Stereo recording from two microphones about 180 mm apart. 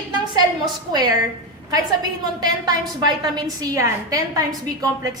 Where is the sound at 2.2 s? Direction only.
20° right (ahead or behind).